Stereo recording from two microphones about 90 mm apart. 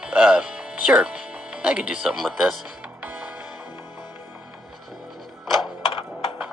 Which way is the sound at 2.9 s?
15° right (ahead or behind).